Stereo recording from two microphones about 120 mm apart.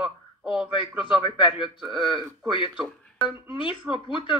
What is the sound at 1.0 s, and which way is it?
Speech, 45° left (ahead or behind).